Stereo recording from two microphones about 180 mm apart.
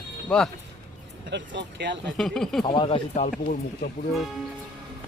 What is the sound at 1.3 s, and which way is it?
Speech, 85° right.